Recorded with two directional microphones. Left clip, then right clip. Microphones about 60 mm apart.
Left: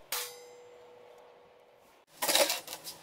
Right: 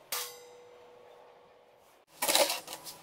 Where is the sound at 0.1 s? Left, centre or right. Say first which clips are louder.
Even; left.